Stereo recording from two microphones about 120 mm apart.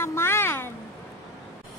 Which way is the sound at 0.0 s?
20° left (ahead or behind).